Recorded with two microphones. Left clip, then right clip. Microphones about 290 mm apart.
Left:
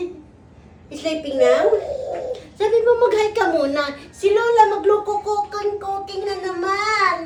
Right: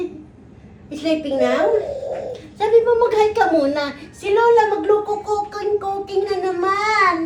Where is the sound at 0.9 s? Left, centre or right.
Centre.